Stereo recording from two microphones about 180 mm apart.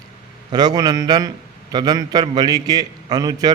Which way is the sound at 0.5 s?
20° right (ahead or behind).